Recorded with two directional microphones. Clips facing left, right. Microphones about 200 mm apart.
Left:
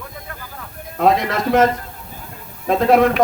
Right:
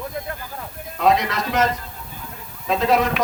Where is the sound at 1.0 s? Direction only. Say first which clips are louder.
Left 3 dB; 50° left (ahead or behind).